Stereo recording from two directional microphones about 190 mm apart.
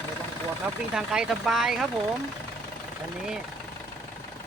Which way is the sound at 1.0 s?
5° right (ahead or behind).